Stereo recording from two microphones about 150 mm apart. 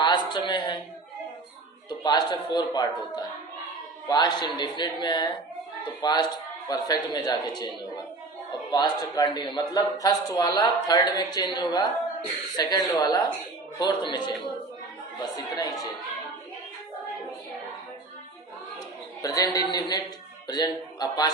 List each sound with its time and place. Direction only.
0.0 s a sound: 30° left (ahead or behind)
1.9 s a man's voice: 30° left (ahead or behind)
8.7 s a man's voice: 30° left (ahead or behind)
19.2 s a man's voice: 25° left (ahead or behind)